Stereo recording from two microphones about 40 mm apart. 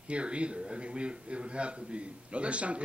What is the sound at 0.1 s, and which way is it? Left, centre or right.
A man's voice, right.